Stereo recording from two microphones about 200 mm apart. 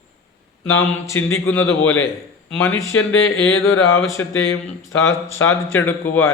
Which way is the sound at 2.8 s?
90° left.